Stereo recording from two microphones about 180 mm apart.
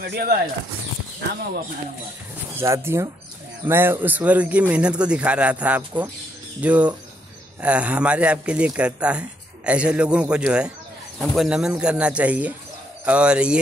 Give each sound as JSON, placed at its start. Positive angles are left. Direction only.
{"t": 0.0, "sound": "speech", "side_deg": -60}
{"t": 2.5, "sound": "a man's voice", "side_deg": -15}